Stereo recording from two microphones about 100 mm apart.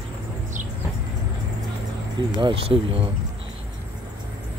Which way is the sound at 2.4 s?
60° right (ahead or behind).